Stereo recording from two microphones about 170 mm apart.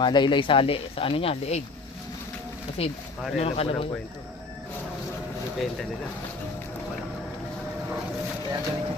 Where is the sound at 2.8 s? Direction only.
35° left (ahead or behind).